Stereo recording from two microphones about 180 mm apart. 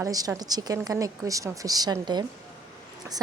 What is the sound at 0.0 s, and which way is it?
A woman's voice, 20° right (ahead or behind).